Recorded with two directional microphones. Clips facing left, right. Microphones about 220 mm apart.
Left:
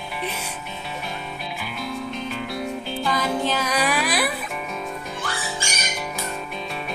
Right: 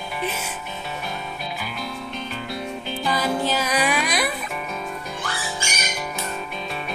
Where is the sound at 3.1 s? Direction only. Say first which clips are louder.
Right 1 dB; 5° right (ahead or behind).